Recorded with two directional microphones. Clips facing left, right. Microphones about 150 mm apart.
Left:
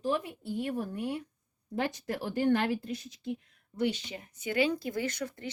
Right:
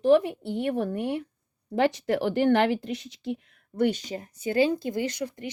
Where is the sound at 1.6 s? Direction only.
90° right.